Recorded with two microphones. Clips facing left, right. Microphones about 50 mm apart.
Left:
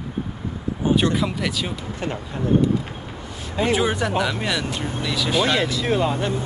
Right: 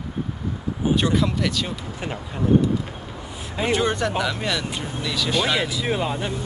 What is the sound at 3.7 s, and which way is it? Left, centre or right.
Speech, centre.